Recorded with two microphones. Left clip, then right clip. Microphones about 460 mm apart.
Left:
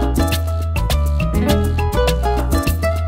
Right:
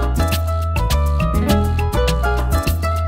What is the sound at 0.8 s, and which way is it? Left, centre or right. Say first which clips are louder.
Music: even; left.